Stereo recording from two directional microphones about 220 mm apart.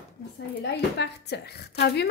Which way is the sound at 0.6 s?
50° left (ahead or behind).